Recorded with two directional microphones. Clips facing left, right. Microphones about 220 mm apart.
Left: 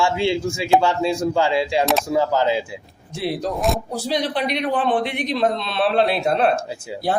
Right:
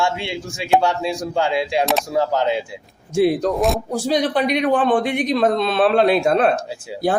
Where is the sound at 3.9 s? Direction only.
45° right (ahead or behind).